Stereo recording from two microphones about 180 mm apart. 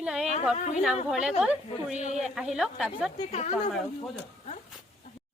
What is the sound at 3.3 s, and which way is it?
Speech, 40° left (ahead or behind).